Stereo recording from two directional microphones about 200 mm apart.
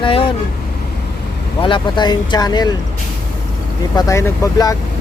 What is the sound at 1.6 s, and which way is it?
Speech, 25° left (ahead or behind).